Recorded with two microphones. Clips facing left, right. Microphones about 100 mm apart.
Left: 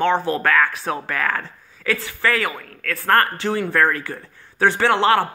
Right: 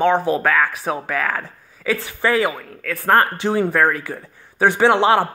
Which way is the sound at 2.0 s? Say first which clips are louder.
Right 5 dB; 20° right (ahead or behind).